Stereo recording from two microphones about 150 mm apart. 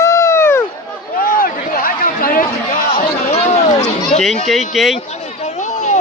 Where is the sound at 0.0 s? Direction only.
20° left (ahead or behind).